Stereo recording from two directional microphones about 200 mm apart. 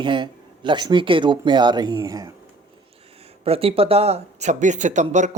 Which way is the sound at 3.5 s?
30° right (ahead or behind).